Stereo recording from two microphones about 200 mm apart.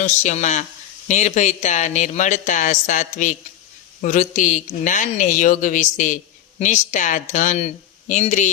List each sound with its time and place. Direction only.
0.0 s speech: 35° left (ahead or behind)